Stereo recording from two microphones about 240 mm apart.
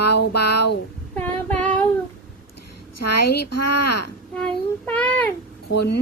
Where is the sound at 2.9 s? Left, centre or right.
Left.